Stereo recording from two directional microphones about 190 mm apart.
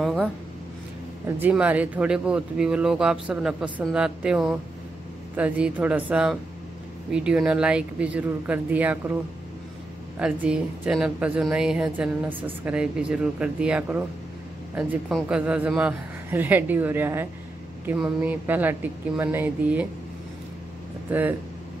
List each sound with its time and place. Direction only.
0.0 s a sound: centre (ahead or behind)
1.2 s a man's voice: 10° right (ahead or behind)
10.1 s a man's voice: 5° right (ahead or behind)
21.1 s a man's voice: 10° right (ahead or behind)